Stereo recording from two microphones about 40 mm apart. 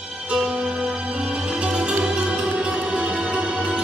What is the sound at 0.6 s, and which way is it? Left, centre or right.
Music, right.